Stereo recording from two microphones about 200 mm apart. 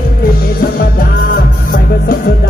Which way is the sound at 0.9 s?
45° left (ahead or behind).